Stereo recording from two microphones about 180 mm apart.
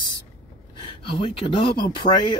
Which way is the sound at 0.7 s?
30° left (ahead or behind).